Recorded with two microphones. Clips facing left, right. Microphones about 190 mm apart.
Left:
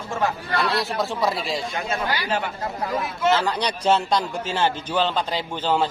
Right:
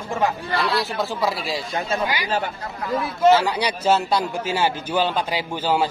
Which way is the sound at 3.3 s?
10° right (ahead or behind).